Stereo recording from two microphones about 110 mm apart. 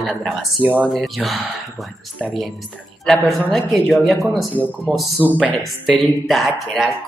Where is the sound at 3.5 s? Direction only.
Centre (ahead or behind).